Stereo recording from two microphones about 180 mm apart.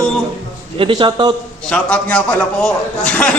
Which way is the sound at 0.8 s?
30° right (ahead or behind).